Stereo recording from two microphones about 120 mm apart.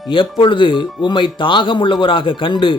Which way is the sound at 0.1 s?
45° left (ahead or behind).